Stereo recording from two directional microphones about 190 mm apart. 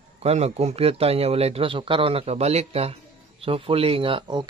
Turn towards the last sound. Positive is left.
turn(degrees=-25)  # may be behind; listen again after turning